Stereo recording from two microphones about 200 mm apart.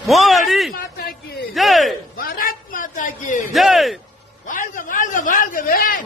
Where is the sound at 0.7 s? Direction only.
45° left (ahead or behind).